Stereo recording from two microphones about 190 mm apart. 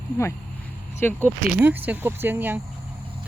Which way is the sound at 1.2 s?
10° right (ahead or behind).